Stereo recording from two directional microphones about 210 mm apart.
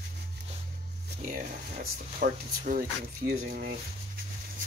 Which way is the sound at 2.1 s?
40° right (ahead or behind).